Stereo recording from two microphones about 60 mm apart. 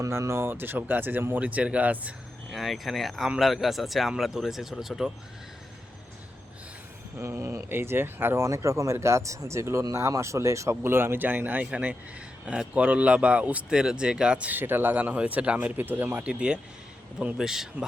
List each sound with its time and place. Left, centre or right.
0.0 s speech: right
2.5 s speech: centre
7.2 s speech: right
8.4 s speech: right
9.8 s speech: right
10.8 s speech: right
14.6 s speech: right
16.2 s speech: centre